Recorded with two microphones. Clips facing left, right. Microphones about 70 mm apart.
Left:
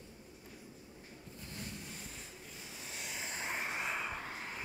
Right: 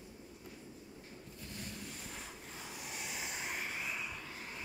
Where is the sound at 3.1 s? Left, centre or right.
Centre.